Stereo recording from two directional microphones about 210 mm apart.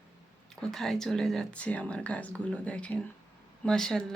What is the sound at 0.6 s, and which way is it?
Speech, centre (ahead or behind).